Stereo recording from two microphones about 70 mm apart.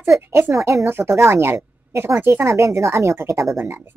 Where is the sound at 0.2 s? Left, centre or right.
Right.